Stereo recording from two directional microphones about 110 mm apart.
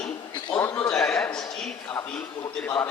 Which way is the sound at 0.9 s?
10° left (ahead or behind).